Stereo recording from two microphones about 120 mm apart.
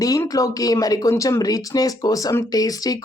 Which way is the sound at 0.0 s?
30° left (ahead or behind).